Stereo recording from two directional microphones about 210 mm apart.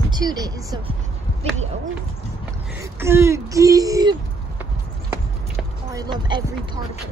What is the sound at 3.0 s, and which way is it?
Speech, 10° right (ahead or behind).